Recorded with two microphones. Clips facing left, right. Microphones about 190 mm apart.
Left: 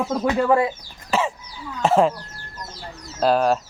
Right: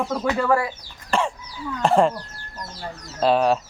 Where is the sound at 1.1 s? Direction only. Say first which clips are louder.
Left 1 dB; 5° left (ahead or behind).